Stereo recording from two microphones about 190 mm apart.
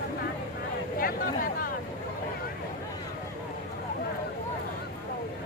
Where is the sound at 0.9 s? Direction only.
50° left (ahead or behind).